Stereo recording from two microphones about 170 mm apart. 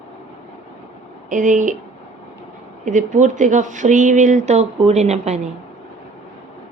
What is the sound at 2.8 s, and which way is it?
A woman's voice, 45° right (ahead or behind).